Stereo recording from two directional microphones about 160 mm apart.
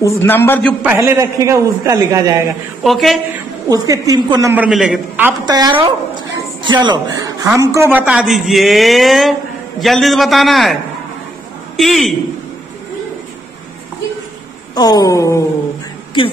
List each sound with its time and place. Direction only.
0.0 s a man's voice: 15° left (ahead or behind)
0.8 s a man's voice: 15° right (ahead or behind)
2.8 s a man's voice: centre (ahead or behind)
3.6 s a man's voice: 20° right (ahead or behind)
4.6 s a man's voice: 5° right (ahead or behind)
5.4 s a man's voice: 25° right (ahead or behind); by 12.2 s centre (ahead or behind)
14.8 s speech: 25° left (ahead or behind)